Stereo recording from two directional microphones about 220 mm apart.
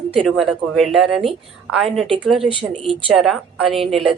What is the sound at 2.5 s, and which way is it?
Speech, 25° right (ahead or behind).